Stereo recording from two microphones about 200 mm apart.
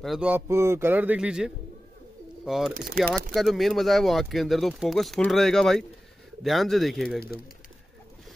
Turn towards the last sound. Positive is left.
turn(degrees=0)  # may be behind; listen again after turning